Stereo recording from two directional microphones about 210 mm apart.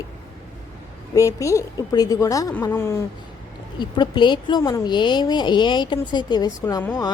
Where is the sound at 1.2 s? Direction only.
15° left (ahead or behind).